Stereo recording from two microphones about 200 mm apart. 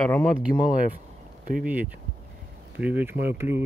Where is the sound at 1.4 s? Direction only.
45° right (ahead or behind).